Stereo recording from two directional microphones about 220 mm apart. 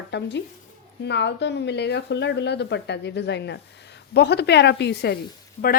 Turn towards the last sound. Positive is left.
turn(degrees=30)  # may be behind; listen again after turning